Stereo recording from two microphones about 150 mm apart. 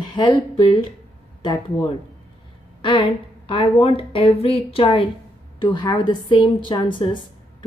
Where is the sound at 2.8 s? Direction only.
35° left (ahead or behind).